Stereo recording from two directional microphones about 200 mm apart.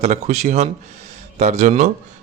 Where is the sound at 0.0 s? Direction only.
35° right (ahead or behind).